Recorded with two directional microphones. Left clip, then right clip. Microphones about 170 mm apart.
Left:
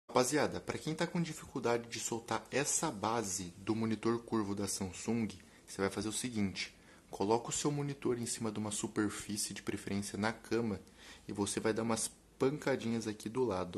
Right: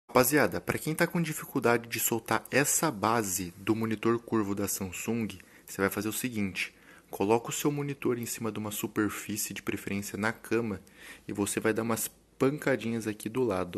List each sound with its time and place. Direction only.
0.1 s speech: 30° right (ahead or behind)